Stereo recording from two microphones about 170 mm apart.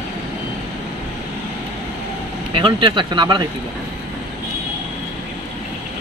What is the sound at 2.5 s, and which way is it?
Speech, 30° right (ahead or behind).